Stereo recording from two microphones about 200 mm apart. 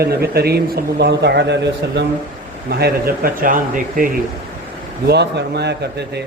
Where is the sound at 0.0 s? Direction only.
50° right (ahead or behind).